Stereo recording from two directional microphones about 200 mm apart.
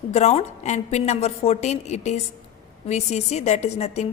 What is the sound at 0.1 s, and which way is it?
A woman's voice, 35° left (ahead or behind).